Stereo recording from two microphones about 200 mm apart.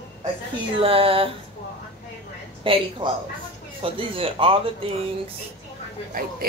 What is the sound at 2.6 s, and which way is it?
Speech, 25° right (ahead or behind).